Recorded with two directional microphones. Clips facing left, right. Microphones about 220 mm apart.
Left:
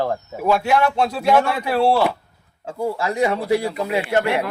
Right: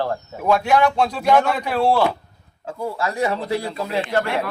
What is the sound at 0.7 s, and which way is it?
Speech, 5° left (ahead or behind).